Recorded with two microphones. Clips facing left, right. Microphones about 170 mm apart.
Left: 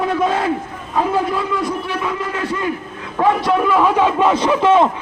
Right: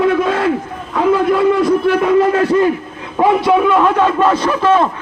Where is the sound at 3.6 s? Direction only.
5° left (ahead or behind).